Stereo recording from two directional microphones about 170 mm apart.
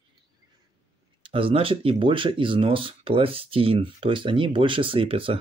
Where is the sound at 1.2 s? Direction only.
30° right (ahead or behind).